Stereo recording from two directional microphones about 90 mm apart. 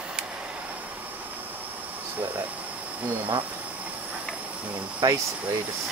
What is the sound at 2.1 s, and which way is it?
Air conditioning, 15° right (ahead or behind).